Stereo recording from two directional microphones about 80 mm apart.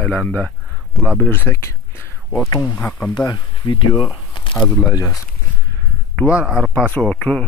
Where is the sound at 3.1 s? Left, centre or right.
Left.